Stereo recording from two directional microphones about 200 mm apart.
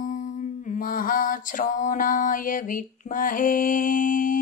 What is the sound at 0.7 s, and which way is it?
Mantra, 45° left (ahead or behind).